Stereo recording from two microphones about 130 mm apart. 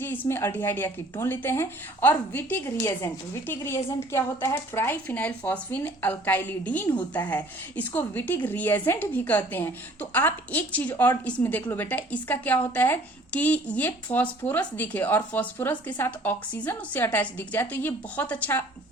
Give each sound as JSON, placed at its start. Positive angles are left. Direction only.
{"t": 0.0, "sound": "a woman's voice", "side_deg": 15}